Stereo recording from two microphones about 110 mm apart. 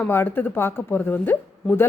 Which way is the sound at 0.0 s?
20° left (ahead or behind).